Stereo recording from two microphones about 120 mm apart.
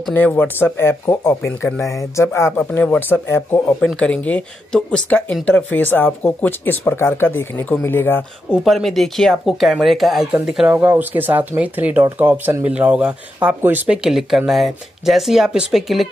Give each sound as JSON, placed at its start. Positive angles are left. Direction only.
{"t": 0.1, "sound": "speech", "side_deg": 15}
{"t": 3.8, "sound": "speech", "side_deg": 10}
{"t": 8.6, "sound": "speech", "side_deg": 0}